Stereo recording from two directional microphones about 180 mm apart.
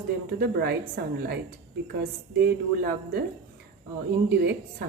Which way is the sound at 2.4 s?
60° right (ahead or behind).